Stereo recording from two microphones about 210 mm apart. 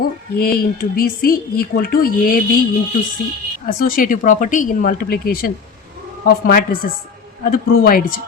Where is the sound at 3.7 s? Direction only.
45° left (ahead or behind).